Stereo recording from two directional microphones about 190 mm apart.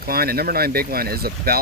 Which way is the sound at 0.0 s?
55° right (ahead or behind).